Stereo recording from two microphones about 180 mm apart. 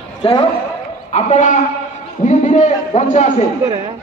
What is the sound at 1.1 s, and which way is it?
A man's voice, 40° left (ahead or behind).